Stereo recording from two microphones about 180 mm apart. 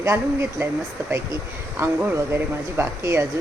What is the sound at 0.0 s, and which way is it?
Speech, 15° right (ahead or behind).